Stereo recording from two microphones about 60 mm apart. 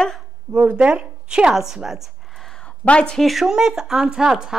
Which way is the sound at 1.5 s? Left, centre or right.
Centre.